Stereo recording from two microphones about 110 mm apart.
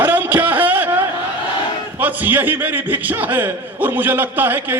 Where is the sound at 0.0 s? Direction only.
15° right (ahead or behind).